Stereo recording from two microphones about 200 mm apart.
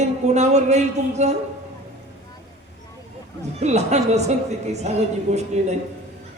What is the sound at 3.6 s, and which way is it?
A man's voice, 35° right (ahead or behind).